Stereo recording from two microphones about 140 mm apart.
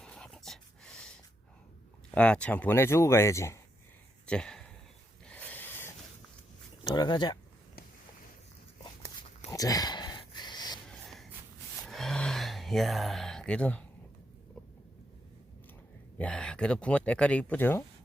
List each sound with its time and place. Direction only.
0.0 s dog: 5° left (ahead or behind)
2.1 s speech: 10° left (ahead or behind)
4.3 s a sound: 5° left (ahead or behind)
5.2 s rub: 10° left (ahead or behind)
6.9 s speech: 30° left (ahead or behind)
8.8 s a sound: 30° left (ahead or behind)
11.9 s gasp: centre (ahead or behind)
16.1 s speech: 5° left (ahead or behind)